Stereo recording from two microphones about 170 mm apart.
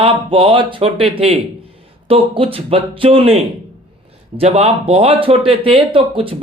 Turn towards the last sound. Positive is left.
turn(degrees=-30)  # may be behind; listen again after turning